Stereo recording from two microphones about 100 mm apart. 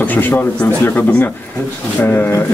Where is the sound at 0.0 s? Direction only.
20° left (ahead or behind).